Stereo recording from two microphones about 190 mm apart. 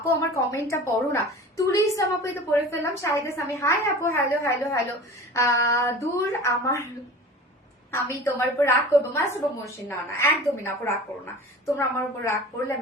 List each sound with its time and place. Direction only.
0.1 s a woman's voice: 15° left (ahead or behind)
7.9 s a woman's voice: 15° left (ahead or behind)